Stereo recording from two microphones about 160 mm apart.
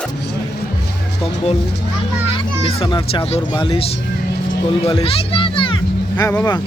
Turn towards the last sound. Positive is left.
turn(degrees=20)  # may be behind; listen again after turning